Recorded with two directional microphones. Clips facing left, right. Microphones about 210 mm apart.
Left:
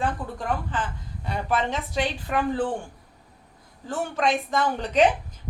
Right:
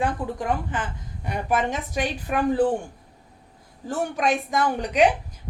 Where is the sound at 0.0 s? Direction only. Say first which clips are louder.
Right 3 dB; 15° right (ahead or behind).